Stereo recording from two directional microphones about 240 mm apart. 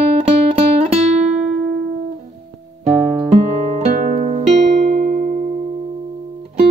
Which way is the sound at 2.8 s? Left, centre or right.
Right.